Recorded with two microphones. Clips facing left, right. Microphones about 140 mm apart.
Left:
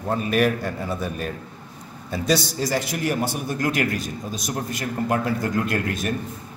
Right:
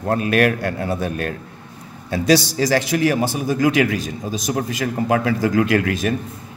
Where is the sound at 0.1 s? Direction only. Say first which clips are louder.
Right 3 dB; 75° right (ahead or behind).